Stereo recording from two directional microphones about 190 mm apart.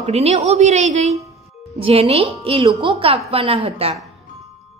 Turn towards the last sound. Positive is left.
turn(degrees=-30)  # may be behind; listen again after turning